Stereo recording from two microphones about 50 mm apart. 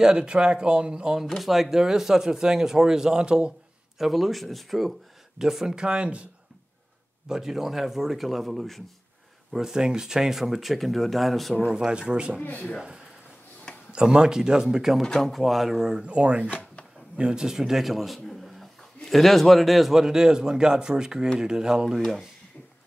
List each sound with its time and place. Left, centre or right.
0.0 s speech: centre
4.0 s speech: centre
5.4 s speech: centre
7.2 s speech: centre
9.5 s speech: centre
11.6 s speech: centre
12.4 s speech: left
13.9 s speech: centre
15.0 s speech: centre; by 16.4 s right
16.4 s drawer open or close: left
17.2 s a man's voice: centre